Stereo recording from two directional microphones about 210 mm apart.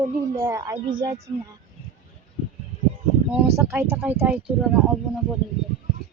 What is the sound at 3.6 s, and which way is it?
Speech, 10° right (ahead or behind).